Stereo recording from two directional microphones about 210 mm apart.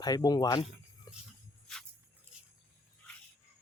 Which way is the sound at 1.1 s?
15° left (ahead or behind).